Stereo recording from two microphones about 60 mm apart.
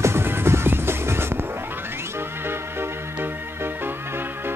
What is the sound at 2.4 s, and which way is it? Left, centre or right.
Music, right.